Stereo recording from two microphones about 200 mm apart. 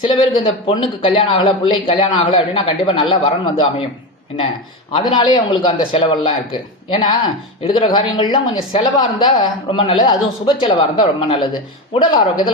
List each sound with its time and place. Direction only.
0.1 s speech: 25° left (ahead or behind)
4.9 s speech: 25° left (ahead or behind)